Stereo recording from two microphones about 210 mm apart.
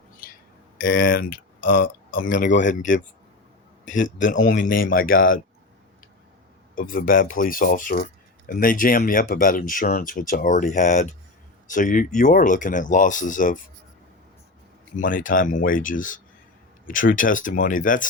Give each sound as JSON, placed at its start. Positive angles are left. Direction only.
{"t": 0.8, "sound": "speech", "side_deg": 45}
{"t": 6.7, "sound": "speech", "side_deg": 40}
{"t": 14.9, "sound": "speech", "side_deg": 40}